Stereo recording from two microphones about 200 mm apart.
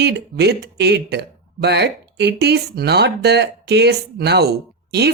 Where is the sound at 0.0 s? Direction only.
55° right (ahead or behind).